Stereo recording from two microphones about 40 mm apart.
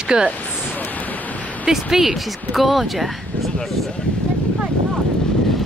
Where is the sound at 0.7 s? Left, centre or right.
Left.